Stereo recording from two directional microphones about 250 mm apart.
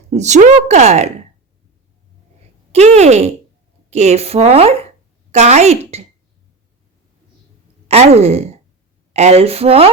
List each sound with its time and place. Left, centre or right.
0.1 s a woman's voice: right
2.7 s a woman's voice: right
7.9 s a woman's voice: right